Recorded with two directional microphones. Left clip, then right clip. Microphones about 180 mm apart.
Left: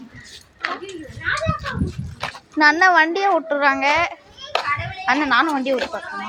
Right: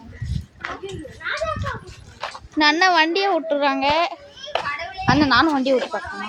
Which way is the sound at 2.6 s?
5° right (ahead or behind).